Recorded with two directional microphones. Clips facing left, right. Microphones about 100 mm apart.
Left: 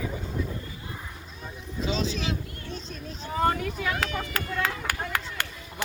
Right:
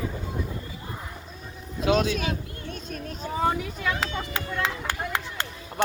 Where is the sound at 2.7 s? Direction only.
55° right (ahead or behind).